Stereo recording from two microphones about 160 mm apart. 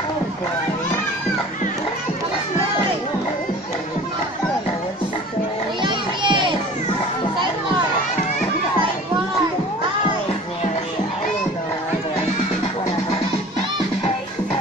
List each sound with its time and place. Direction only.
5.8 s children playing: 30° right (ahead or behind)